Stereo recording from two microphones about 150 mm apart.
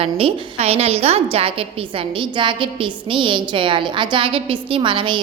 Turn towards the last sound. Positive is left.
turn(degrees=-35)  # may be behind; listen again after turning